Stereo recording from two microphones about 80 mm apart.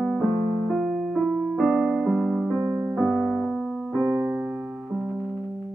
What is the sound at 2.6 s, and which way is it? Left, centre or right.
Music, right.